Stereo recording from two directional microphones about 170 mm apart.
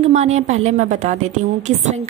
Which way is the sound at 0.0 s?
40° right (ahead or behind).